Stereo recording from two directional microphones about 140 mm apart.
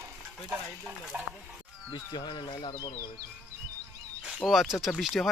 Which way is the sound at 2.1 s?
35° left (ahead or behind).